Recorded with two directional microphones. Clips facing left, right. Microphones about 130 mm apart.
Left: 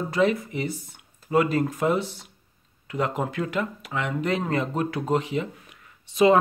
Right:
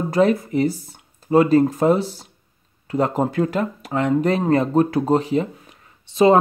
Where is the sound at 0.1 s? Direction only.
40° right (ahead or behind).